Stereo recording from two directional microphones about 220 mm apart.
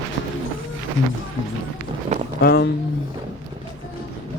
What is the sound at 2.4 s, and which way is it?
Speech, 45° left (ahead or behind).